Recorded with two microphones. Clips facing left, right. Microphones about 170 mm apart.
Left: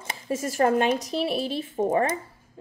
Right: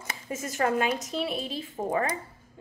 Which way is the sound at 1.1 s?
75° left (ahead or behind).